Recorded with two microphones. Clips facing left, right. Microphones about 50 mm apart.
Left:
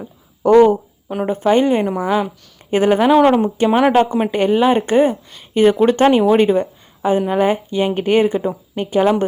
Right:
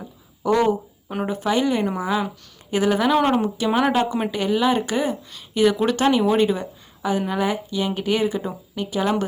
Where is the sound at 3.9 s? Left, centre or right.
Left.